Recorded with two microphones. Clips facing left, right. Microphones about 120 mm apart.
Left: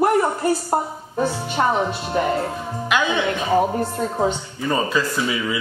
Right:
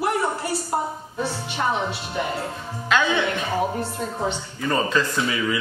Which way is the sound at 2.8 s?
15° left (ahead or behind).